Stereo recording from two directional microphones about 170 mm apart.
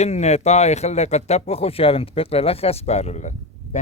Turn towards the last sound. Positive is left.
turn(degrees=40)  # may be behind; listen again after turning